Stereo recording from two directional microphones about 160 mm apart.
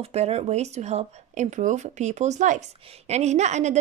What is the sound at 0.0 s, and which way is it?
A woman's voice, 40° right (ahead or behind).